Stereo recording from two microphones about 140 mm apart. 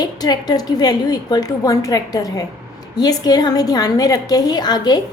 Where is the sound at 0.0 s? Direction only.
30° left (ahead or behind).